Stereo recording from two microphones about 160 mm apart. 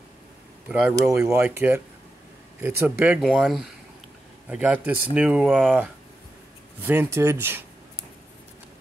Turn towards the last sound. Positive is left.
turn(degrees=-15)  # may be behind; listen again after turning